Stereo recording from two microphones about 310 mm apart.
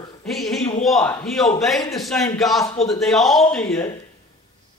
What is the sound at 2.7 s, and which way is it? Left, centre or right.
Speech, centre.